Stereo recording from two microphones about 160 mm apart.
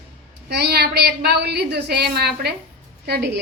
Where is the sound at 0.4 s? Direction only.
90° right.